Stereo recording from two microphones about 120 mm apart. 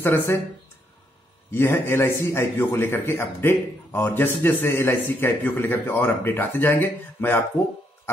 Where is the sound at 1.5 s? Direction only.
20° left (ahead or behind).